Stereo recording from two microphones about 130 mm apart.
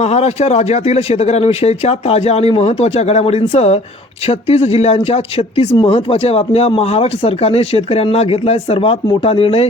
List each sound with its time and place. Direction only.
0.0 s speech: 55° left (ahead or behind)